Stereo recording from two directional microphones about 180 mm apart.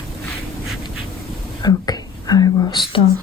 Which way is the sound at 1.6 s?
20° left (ahead or behind).